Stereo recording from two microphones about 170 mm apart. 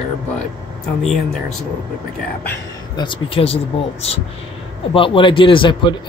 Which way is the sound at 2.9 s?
30° left (ahead or behind).